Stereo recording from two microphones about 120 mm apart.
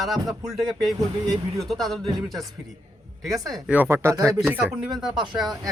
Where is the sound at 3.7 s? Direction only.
20° right (ahead or behind).